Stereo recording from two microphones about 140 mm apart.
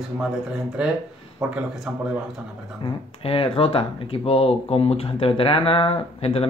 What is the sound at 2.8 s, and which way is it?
Speech, 40° left (ahead or behind).